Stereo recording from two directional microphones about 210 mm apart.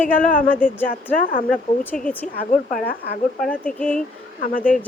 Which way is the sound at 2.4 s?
45° left (ahead or behind).